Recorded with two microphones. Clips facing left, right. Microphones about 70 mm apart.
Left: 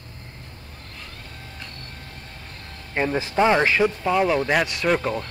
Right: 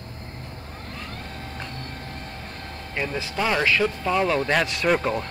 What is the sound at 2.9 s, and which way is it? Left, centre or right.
Speech, left.